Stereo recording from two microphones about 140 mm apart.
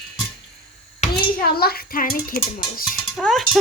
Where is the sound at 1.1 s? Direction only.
90° left.